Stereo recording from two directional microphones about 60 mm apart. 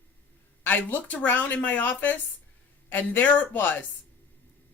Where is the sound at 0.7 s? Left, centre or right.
Left.